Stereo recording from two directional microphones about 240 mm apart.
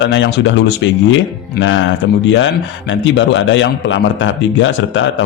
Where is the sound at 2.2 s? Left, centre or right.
Left.